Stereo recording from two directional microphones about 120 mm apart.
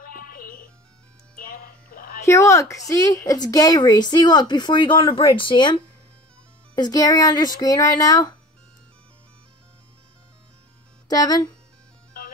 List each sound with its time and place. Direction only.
2.2 s a woman's voice: 25° left (ahead or behind)
11.1 s a woman's voice: 30° left (ahead or behind)